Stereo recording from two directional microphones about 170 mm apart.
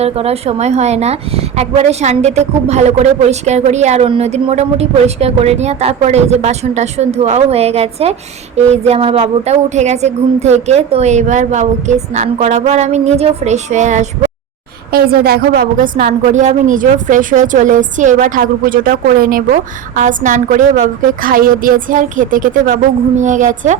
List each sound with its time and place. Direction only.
0.0 s a woman's voice: 35° right (ahead or behind)
14.9 s a woman's voice: 65° right (ahead or behind); by 23.7 s 45° right (ahead or behind)